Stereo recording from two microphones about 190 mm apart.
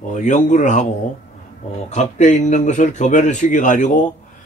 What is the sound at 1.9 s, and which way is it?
Speech, 40° left (ahead or behind).